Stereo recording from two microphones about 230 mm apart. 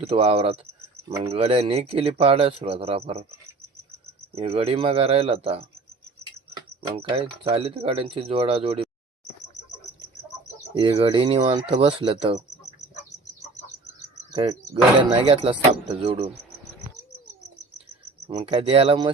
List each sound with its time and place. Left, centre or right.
0.0 s speech: right
4.4 s speech: right
6.9 s speech: right
10.8 s speech: right
14.3 s speech: right
18.3 s speech: right